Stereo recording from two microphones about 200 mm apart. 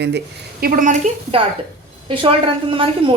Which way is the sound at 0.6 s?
40° right (ahead or behind).